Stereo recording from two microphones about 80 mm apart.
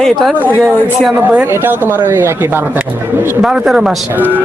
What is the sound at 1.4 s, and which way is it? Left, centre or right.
Speech, right.